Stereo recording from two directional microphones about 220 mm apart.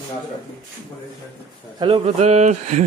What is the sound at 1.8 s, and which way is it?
A man's voice, 25° right (ahead or behind).